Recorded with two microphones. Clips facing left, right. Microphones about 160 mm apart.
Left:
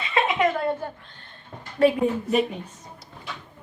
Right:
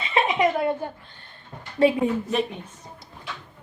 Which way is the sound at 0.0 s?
20° right (ahead or behind).